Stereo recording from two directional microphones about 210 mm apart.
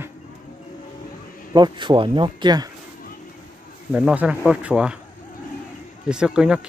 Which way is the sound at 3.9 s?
5° right (ahead or behind).